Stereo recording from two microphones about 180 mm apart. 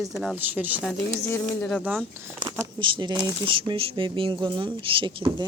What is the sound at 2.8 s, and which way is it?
Speech, 25° right (ahead or behind).